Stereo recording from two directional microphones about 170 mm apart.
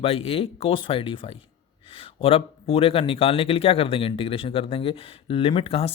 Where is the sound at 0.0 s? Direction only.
35° left (ahead or behind).